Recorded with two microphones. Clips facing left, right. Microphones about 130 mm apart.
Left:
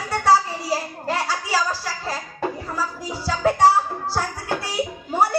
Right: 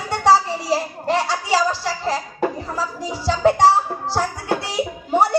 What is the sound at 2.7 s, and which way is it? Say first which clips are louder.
Music: right 2 dB; 30° right (ahead or behind).